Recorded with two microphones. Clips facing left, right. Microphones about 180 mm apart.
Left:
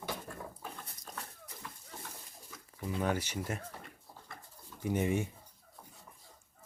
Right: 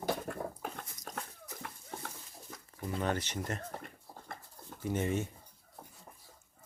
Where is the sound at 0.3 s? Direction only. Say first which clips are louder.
Right 6 dB; 60° right (ahead or behind).